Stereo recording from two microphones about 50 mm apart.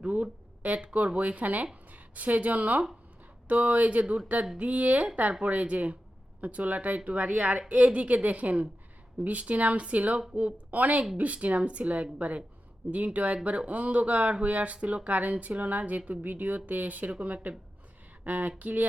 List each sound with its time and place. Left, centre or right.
0.0 s speech: right